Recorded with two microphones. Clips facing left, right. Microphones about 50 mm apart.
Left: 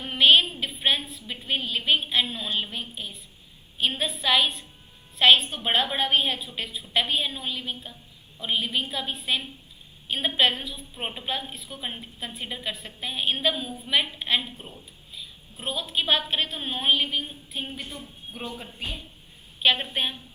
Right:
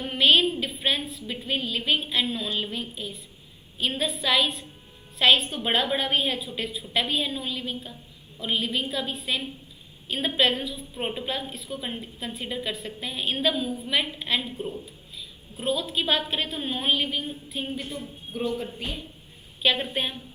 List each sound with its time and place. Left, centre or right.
0.0 s a sound: centre
2.6 s a woman's voice: centre
15.6 s a woman's voice: centre
19.6 s a woman's voice: centre